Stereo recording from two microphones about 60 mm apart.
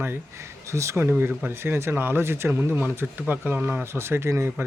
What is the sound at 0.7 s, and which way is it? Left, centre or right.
Speech, right.